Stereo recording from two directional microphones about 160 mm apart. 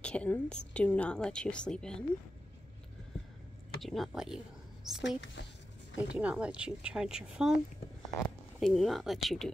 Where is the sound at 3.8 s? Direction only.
Centre (ahead or behind).